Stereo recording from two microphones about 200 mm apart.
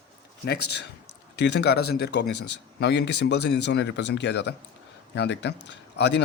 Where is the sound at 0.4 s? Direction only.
55° left (ahead or behind).